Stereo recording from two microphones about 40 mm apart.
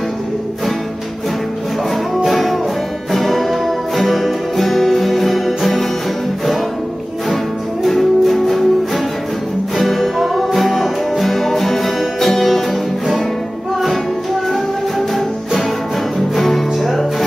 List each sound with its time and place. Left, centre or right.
2.2 s music: centre
7.8 s music: centre
14.5 s music: centre